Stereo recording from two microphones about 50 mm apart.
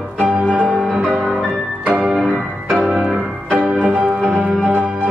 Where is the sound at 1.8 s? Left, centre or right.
Right.